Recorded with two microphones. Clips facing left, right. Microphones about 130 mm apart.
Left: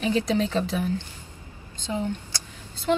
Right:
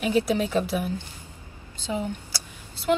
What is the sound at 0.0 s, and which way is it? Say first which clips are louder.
A woman's voice: even; 10° right (ahead or behind).